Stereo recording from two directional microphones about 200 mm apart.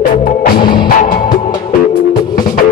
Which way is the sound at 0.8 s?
45° left (ahead or behind).